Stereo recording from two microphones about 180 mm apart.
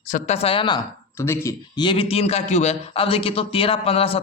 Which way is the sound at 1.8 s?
30° left (ahead or behind).